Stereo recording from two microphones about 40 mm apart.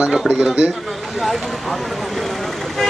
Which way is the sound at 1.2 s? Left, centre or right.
Centre.